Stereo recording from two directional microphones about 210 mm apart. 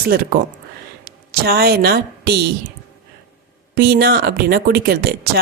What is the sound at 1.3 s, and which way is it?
A woman's voice, 50° right (ahead or behind).